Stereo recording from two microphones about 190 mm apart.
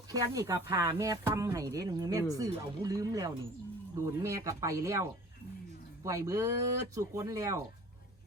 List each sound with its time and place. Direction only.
0.1 s speech: 20° right (ahead or behind)
6.1 s speech: 15° right (ahead or behind)